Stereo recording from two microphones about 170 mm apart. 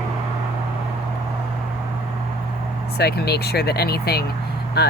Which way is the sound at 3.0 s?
70° left (ahead or behind).